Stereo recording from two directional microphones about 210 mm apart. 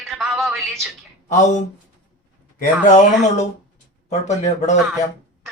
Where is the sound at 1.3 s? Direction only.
35° left (ahead or behind).